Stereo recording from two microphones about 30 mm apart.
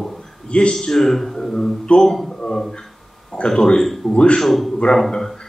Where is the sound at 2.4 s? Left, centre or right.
Centre.